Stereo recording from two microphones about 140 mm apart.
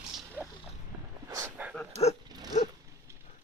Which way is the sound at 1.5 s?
10° right (ahead or behind).